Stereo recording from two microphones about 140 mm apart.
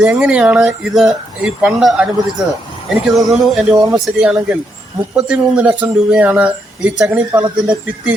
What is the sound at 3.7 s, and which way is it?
Speech, 30° right (ahead or behind).